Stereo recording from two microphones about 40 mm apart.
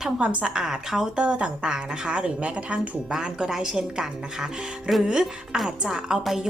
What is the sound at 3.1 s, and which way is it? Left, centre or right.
A woman's voice, centre.